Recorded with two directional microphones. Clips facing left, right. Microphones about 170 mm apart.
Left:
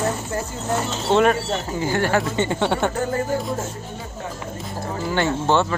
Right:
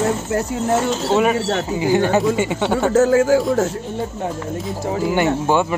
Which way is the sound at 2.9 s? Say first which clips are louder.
Right 10 dB; 90° right.